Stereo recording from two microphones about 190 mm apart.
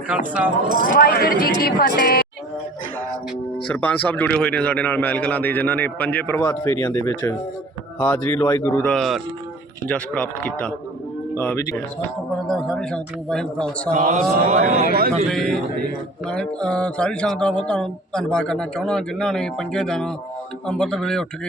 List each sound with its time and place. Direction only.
0.1 s speech: 5° right (ahead or behind)
0.7 s speech: 45° right (ahead or behind)
0.9 s speech: 55° left (ahead or behind)
3.7 s a man's voice: 10° left (ahead or behind)
12.5 s mantra: centre (ahead or behind)
13.9 s speech: 40° right (ahead or behind)
15.3 s mantra: centre (ahead or behind)